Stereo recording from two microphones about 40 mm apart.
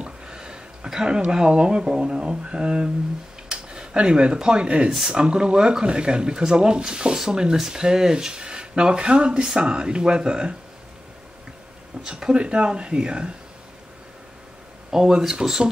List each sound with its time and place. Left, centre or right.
0.0 s a sound: right
0.8 s speech: centre
12.0 s speech: right
14.9 s speech: centre